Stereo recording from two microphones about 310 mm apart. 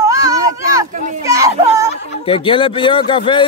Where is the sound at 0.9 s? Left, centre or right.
Right.